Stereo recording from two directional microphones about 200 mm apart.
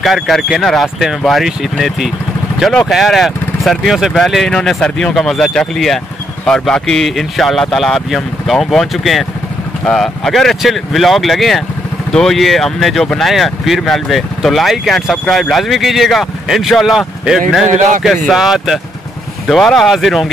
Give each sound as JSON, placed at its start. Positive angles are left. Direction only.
{"t": 0.0, "sound": "speech", "side_deg": 0}
{"t": 17.6, "sound": "a man's voice", "side_deg": -40}
{"t": 18.0, "sound": "speech", "side_deg": 0}